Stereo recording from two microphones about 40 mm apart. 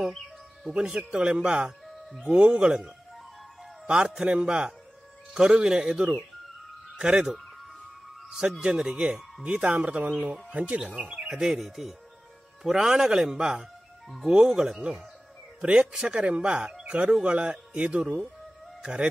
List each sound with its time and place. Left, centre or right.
0.7 s speech: right
4.3 s speech: right
7.3 s music: centre
8.3 s speech: centre
11.5 s speech: centre
16.2 s speech: right